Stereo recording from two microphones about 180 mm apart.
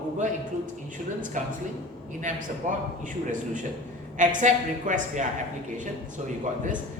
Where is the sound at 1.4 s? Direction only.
45° right (ahead or behind).